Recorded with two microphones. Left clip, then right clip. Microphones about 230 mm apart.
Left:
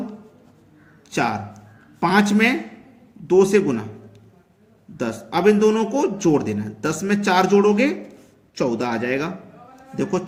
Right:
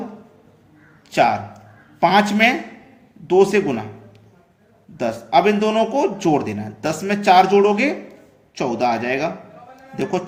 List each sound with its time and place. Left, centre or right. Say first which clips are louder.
1.1 s a man's voice: right 6 dB; left
4.9 s a man's voice: right 7 dB; left